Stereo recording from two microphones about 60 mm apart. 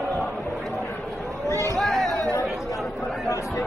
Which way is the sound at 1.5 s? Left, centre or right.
Right.